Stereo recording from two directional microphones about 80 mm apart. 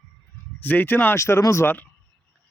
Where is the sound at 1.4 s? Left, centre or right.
Left.